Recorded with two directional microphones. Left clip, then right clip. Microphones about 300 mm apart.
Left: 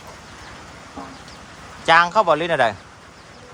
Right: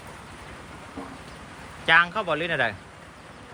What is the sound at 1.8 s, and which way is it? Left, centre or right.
Speech, centre.